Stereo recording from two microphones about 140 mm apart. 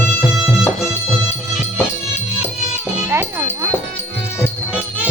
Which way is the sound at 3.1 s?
20° right (ahead or behind).